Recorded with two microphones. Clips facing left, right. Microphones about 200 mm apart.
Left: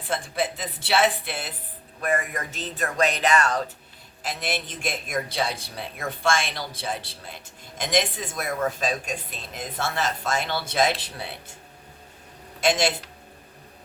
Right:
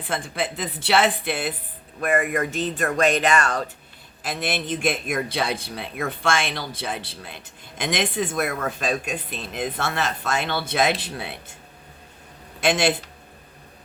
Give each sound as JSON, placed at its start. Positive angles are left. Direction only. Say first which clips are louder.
{"t": 0.1, "sound": "speech", "louder": "even", "side_deg": -60}
{"t": 12.5, "sound": "speech", "louder": "right 1 dB", "side_deg": -60}